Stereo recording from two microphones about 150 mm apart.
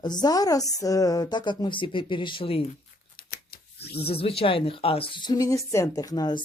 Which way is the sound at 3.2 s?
90° left.